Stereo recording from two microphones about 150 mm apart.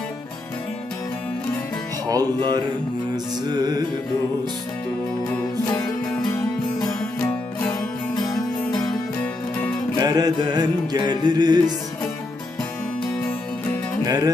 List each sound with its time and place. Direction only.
2.0 s music: 25° right (ahead or behind)
6.8 s music: 10° left (ahead or behind)
9.2 s music: 10° left (ahead or behind)
10.0 s music: 25° right (ahead or behind)
14.0 s music: 25° right (ahead or behind)